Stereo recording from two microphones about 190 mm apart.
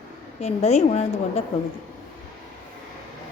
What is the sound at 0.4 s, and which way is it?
Speech, 35° left (ahead or behind).